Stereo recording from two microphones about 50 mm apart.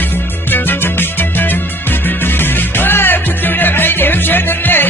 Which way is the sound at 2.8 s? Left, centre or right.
Left.